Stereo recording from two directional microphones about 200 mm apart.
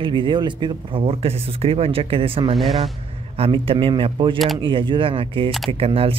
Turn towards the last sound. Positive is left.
turn(degrees=-30)  # may be behind; listen again after turning